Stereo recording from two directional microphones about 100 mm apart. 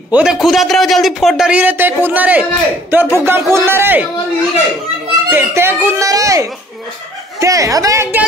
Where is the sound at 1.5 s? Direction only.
15° right (ahead or behind).